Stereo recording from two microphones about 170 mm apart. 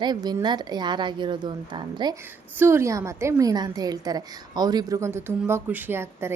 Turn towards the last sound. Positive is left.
turn(degrees=-15)  # may be behind; listen again after turning